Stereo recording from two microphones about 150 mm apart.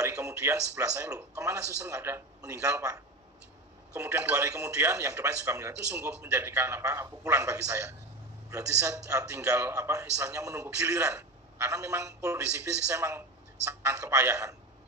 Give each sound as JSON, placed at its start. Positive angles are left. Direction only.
{"t": 0.0, "sound": "a man's voice", "side_deg": -20}